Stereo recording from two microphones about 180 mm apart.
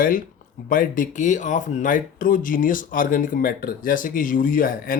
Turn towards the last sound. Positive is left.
turn(degrees=50)  # may be behind; listen again after turning